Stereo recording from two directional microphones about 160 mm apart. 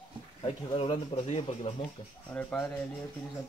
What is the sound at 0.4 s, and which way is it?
Speech, 35° left (ahead or behind).